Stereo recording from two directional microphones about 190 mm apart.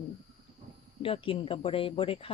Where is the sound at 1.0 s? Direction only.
30° left (ahead or behind).